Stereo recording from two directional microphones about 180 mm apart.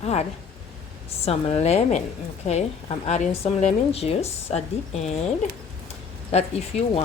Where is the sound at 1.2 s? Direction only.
35° left (ahead or behind).